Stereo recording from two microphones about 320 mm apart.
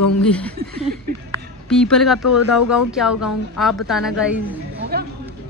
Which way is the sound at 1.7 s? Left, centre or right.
Centre.